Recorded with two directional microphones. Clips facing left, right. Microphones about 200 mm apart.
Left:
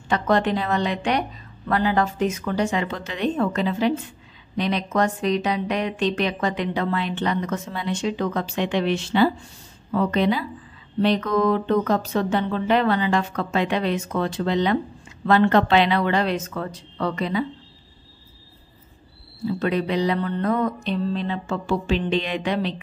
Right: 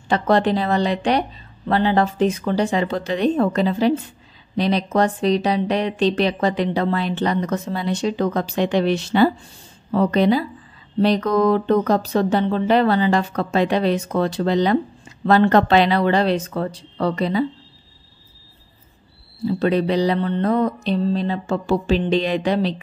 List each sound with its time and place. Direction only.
0.1 s speech: 35° right (ahead or behind)
19.4 s speech: 35° right (ahead or behind)